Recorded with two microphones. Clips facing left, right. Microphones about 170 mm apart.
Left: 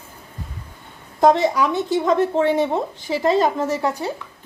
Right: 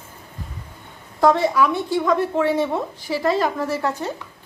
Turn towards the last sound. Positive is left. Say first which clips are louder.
# left 2 dB
turn(degrees=15)  # may be behind; listen again after turning